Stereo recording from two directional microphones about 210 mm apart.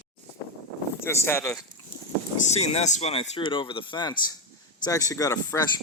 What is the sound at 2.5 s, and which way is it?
Speech, 30° left (ahead or behind).